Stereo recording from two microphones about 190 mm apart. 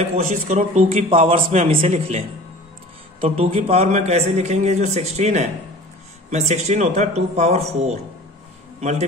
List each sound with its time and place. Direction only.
0.0 s a man's voice: 35° right (ahead or behind)